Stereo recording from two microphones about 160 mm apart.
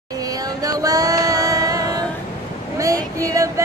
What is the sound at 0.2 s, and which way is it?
Music, 20° right (ahead or behind).